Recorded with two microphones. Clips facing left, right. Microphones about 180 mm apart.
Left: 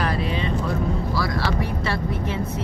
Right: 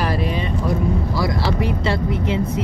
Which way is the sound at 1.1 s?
20° right (ahead or behind).